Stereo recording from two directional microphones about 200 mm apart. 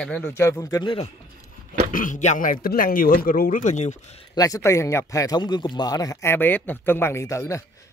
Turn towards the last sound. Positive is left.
turn(degrees=15)  # may be behind; listen again after turning